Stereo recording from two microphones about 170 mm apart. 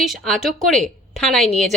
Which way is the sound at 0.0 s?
Centre (ahead or behind).